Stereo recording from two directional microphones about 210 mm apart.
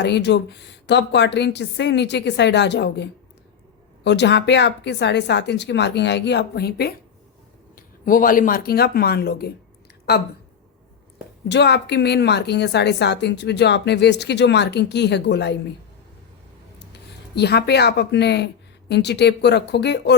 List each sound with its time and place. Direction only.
0.0 s a woman's voice: 55° left (ahead or behind)
11.4 s a woman's voice: 55° left (ahead or behind)
16.9 s speech: 50° left (ahead or behind)